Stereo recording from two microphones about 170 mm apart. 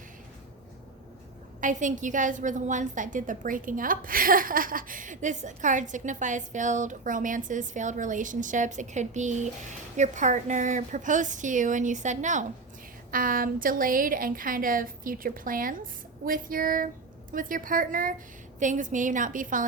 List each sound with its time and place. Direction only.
1.6 s a woman's voice: 50° right (ahead or behind)